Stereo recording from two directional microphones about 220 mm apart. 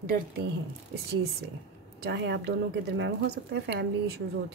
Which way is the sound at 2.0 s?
50° right (ahead or behind).